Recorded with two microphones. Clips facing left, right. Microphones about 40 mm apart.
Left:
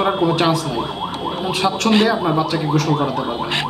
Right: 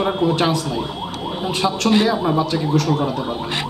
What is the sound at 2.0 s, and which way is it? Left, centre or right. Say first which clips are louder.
Speech: left 1 dB; centre.